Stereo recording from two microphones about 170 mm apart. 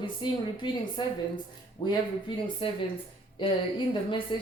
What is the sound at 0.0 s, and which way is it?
A woman's voice, 30° left (ahead or behind).